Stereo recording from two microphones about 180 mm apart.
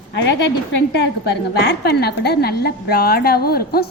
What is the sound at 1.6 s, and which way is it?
A woman's voice, 70° left (ahead or behind).